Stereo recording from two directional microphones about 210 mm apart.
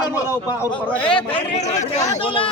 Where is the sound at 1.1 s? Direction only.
35° left (ahead or behind).